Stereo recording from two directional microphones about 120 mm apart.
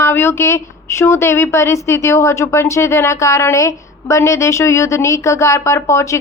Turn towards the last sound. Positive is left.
turn(degrees=25)  # may be behind; listen again after turning